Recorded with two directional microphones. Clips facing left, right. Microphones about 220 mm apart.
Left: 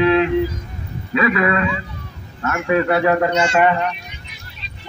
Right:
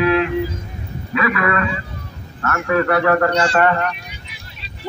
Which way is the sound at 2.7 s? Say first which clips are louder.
Even; 20° left (ahead or behind).